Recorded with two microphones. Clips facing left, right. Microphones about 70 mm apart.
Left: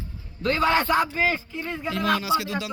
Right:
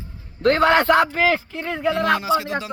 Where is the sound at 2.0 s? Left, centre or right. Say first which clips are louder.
Left 1 dB; right.